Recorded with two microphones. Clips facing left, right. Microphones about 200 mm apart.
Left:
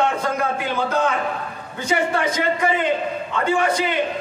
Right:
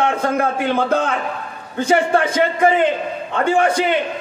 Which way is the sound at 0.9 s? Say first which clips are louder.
Right 2 dB; 55° right (ahead or behind).